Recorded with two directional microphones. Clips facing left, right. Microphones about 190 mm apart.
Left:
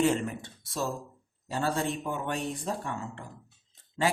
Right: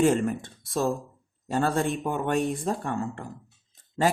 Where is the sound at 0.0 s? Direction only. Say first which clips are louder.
Right 4 dB; 50° right (ahead or behind).